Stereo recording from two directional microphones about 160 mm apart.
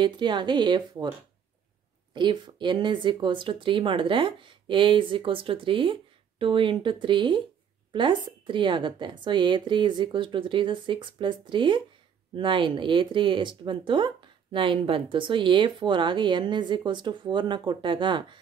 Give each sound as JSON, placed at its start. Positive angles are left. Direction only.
{"t": 0.0, "sound": "a woman's voice", "side_deg": -30}
{"t": 2.1, "sound": "speech", "side_deg": -30}